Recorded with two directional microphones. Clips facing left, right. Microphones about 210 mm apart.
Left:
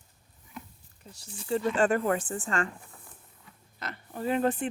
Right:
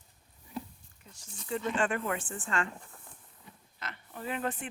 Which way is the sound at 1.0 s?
35° left (ahead or behind).